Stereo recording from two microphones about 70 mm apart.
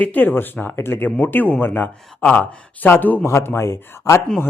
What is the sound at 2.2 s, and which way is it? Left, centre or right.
Speech, centre.